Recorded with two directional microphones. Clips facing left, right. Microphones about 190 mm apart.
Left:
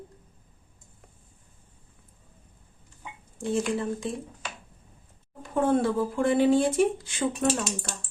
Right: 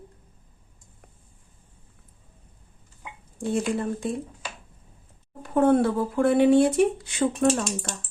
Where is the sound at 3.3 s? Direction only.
60° right (ahead or behind).